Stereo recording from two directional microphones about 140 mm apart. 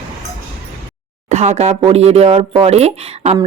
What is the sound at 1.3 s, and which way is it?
A woman's voice, 50° right (ahead or behind).